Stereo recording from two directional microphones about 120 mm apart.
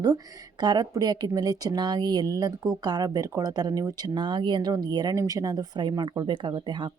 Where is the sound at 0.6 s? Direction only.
35° right (ahead or behind).